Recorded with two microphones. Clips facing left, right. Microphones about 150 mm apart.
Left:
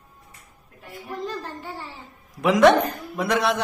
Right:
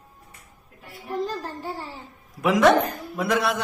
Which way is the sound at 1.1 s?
35° right (ahead or behind).